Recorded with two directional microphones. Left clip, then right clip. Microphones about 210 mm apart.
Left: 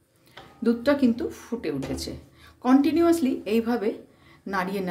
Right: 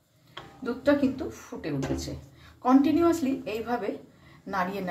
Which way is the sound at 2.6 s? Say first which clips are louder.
Left 1 dB; 55° left (ahead or behind).